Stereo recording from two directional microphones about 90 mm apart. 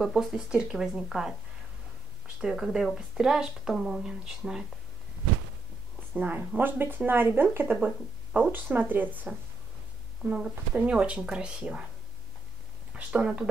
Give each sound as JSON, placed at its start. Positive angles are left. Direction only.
{"t": 0.0, "sound": "speech", "side_deg": -5}
{"t": 2.4, "sound": "speech", "side_deg": -5}
{"t": 6.1, "sound": "speech", "side_deg": -15}
{"t": 12.9, "sound": "speech", "side_deg": -10}